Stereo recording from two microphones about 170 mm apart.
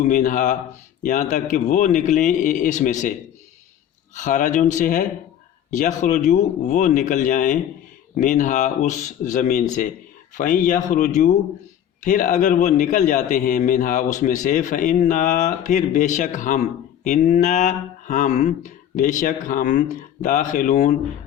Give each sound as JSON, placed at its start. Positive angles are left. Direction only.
{"t": 0.0, "sound": "a man's voice", "side_deg": 50}
{"t": 4.1, "sound": "a man's voice", "side_deg": 50}